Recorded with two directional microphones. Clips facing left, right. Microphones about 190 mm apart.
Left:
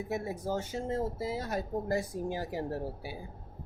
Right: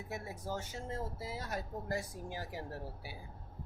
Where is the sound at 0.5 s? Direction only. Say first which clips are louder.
Left 8 dB; 25° left (ahead or behind).